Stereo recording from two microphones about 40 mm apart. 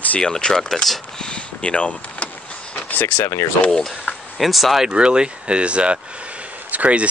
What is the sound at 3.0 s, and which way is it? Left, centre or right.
Speech, left.